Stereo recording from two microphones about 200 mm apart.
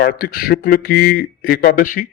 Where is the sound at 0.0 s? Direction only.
50° left (ahead or behind).